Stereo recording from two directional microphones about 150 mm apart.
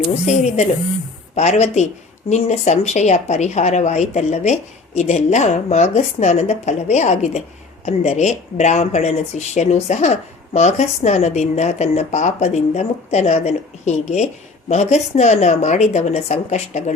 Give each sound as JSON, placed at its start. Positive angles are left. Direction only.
{"t": 0.1, "sound": "speech", "side_deg": 50}